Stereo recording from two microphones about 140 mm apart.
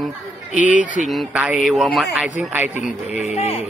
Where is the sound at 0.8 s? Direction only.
65° right (ahead or behind).